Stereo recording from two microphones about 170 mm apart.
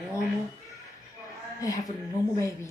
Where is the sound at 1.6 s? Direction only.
20° left (ahead or behind).